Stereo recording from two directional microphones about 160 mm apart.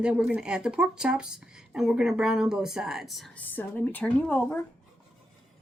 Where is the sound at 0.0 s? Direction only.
5° right (ahead or behind).